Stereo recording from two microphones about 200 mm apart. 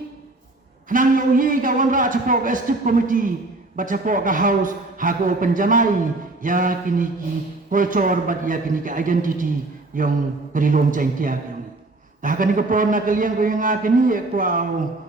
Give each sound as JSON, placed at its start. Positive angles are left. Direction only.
{"t": 0.9, "sound": "a man's voice", "side_deg": -40}